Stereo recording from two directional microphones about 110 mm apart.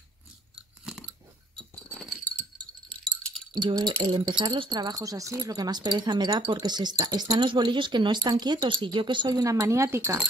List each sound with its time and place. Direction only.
0.6 s chewing: 5° right (ahead or behind)
1.9 s a sound: 5° left (ahead or behind)
3.5 s speech: 40° right (ahead or behind)